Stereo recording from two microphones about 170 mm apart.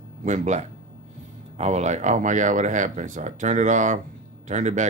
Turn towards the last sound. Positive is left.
turn(degrees=-45)  # may be behind; listen again after turning